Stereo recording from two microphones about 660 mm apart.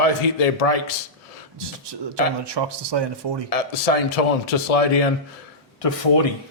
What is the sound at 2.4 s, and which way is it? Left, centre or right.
A man's voice, right.